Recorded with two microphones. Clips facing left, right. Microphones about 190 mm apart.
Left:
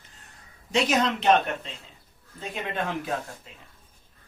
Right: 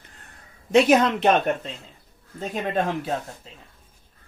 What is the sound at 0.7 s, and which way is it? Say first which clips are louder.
Speech: right 7 dB; 55° right (ahead or behind).